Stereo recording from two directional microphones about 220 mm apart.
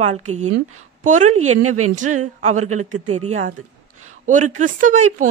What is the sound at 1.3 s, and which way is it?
Speech, 80° right.